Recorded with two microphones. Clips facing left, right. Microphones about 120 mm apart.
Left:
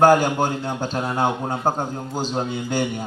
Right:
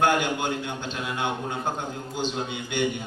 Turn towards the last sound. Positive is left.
turn(degrees=40)  # may be behind; listen again after turning